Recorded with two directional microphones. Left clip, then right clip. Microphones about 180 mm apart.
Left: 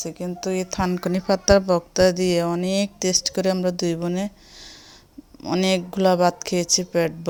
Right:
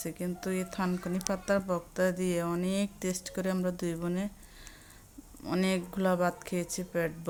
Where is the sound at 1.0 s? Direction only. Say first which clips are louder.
Left 17 dB; 40° left (ahead or behind).